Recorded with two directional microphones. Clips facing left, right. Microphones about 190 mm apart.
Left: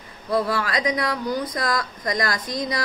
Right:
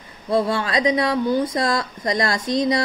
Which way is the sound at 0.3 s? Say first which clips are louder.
Right 3 dB; 25° right (ahead or behind).